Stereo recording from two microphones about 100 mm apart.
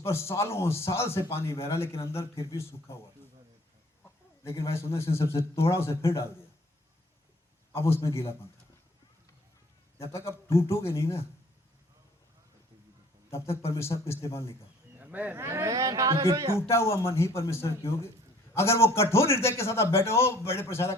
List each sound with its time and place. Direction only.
0.0 s a man's voice: 25° left (ahead or behind)
4.4 s a man's voice: 30° left (ahead or behind)
7.7 s a man's voice: 25° left (ahead or behind)
10.0 s a man's voice: 25° left (ahead or behind)
13.3 s a man's voice: 25° left (ahead or behind)
14.9 s a sound: 15° right (ahead or behind)
15.4 s speech: 30° right (ahead or behind)
16.6 s a man's voice: 25° left (ahead or behind)